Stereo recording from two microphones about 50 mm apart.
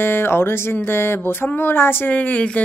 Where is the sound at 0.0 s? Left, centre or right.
Left.